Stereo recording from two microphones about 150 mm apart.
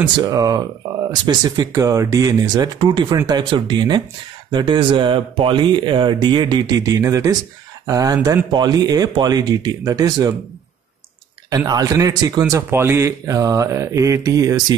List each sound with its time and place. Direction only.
0.0 s a man's voice: 25° right (ahead or behind)
11.5 s a man's voice: 25° right (ahead or behind)